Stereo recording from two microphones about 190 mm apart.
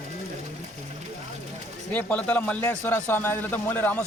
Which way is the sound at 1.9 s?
10° left (ahead or behind).